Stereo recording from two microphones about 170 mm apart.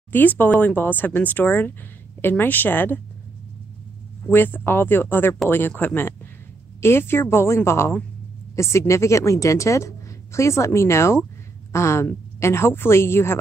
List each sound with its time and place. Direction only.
0.1 s speech: 10° left (ahead or behind)
4.3 s speech: 10° left (ahead or behind)